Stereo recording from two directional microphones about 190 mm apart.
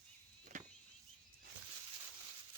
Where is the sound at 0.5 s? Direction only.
40° right (ahead or behind).